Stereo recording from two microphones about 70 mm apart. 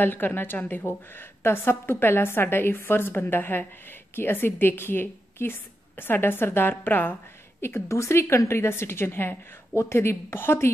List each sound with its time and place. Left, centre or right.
0.0 s a woman's voice: left
7.6 s a woman's voice: left